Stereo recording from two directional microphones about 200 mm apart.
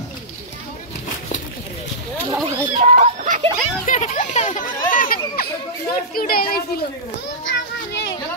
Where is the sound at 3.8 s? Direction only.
40° left (ahead or behind).